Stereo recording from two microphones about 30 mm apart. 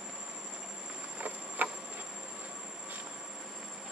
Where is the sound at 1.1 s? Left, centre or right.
Right.